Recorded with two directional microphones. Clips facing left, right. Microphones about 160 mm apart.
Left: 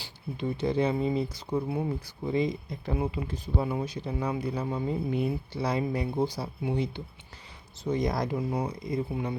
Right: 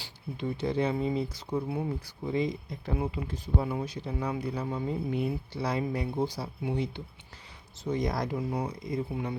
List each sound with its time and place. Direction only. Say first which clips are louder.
0.3 s speech: left 2 dB; 20° left (ahead or behind)